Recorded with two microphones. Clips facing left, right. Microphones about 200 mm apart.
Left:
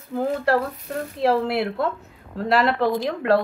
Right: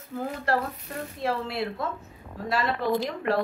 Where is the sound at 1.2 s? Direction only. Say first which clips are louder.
Left 8 dB; 75° left (ahead or behind).